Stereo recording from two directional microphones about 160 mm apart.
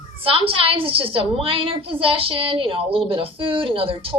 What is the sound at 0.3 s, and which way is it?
A woman's voice, 35° right (ahead or behind).